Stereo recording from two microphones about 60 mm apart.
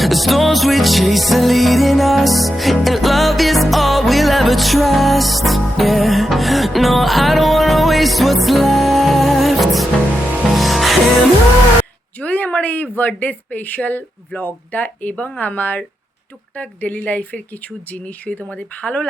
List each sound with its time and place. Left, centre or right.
0.0 s music: centre
12.2 s a sound: left
13.0 s speech: left